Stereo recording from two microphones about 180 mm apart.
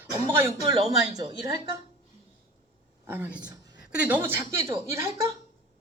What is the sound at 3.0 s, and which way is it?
A woman's voice, 10° right (ahead or behind).